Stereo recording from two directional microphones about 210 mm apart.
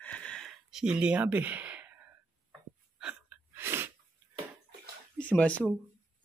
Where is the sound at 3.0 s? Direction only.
5° right (ahead or behind).